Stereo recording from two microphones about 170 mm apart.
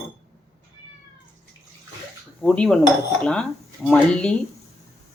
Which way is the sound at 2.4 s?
5° left (ahead or behind).